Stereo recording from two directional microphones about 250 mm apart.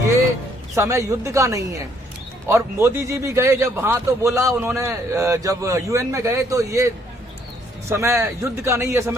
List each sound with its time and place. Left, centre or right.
0.8 s a man's voice: centre